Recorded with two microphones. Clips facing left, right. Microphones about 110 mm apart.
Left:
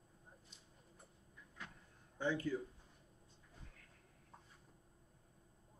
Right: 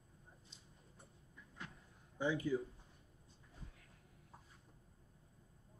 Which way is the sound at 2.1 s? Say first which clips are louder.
Right 1 dB; 10° right (ahead or behind).